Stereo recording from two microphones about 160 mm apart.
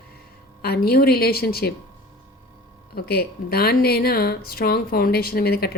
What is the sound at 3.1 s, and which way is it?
Speech, 75° left (ahead or behind).